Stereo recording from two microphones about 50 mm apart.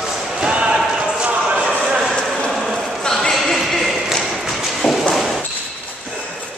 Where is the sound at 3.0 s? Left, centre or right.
Centre.